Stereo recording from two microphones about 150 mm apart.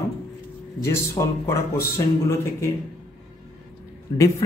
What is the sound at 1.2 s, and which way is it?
Speech, 25° left (ahead or behind).